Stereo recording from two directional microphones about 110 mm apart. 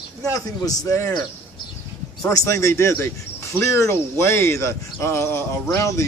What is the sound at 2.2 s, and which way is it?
Speech, 30° left (ahead or behind).